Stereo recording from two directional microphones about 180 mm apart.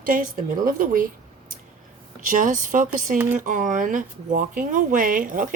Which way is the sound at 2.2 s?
45° right (ahead or behind).